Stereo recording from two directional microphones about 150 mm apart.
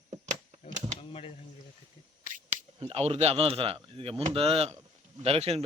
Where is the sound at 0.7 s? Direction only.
55° right (ahead or behind).